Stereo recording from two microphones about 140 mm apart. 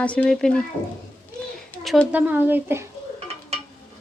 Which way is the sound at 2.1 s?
10° right (ahead or behind).